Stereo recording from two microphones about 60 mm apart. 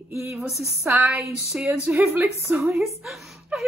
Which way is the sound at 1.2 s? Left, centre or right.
Centre.